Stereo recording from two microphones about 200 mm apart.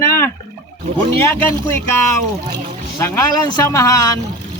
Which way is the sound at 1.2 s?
10° left (ahead or behind).